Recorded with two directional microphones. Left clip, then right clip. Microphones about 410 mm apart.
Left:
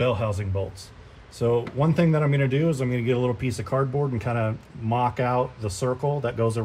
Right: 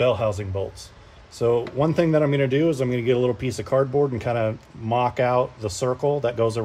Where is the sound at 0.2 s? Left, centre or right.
Centre.